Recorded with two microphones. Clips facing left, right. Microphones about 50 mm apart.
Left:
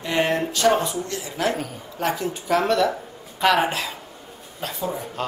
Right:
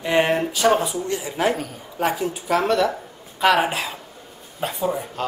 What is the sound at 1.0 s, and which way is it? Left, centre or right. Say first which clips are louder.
Speech: right 3 dB; right.